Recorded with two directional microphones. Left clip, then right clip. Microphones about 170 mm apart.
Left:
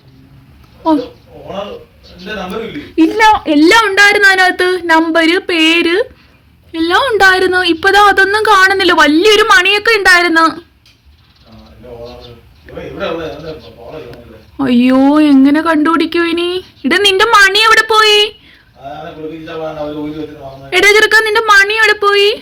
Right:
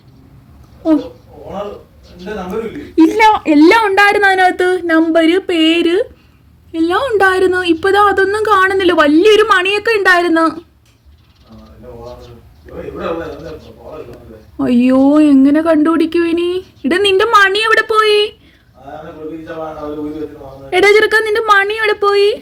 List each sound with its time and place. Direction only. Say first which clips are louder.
2.9 s speech: right 1 dB; 10° right (ahead or behind)
3.2 s a woman's voice: left 3 dB; 25° right (ahead or behind)
3.6 s a woman's voice: left 1 dB; 5° right (ahead or behind)
14.6 s a woman's voice: left 1 dB; centre (ahead or behind)
20.7 s a woman's voice: left 2 dB; centre (ahead or behind)